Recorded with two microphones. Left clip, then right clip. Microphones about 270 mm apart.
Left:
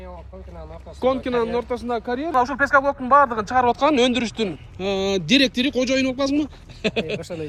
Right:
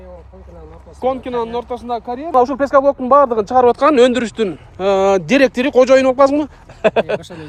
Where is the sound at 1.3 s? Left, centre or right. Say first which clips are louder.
Right 2 dB; centre.